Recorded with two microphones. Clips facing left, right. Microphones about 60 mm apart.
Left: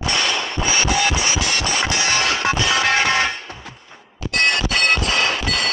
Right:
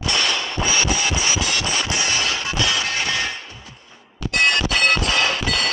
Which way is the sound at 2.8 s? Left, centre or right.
Left.